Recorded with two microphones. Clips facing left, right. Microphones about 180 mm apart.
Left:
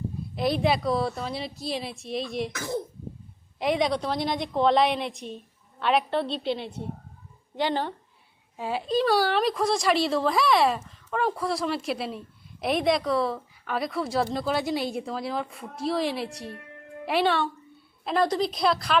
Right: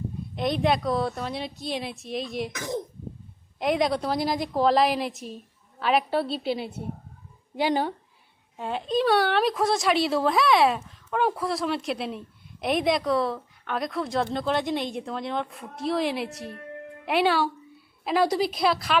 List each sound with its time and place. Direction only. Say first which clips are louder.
0.3 s a woman's voice: even; 5° left (ahead or behind)
2.5 s a woman's voice: even; 15° right (ahead or behind)
3.6 s a woman's voice: right 1 dB; centre (ahead or behind)
8.5 s a woman's voice: even; 5° left (ahead or behind)